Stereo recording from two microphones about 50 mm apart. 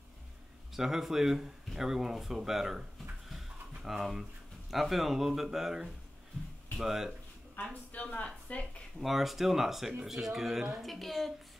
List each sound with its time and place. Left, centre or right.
0.7 s speech: centre
7.9 s speech: left
9.0 s speech: centre
10.9 s speech: centre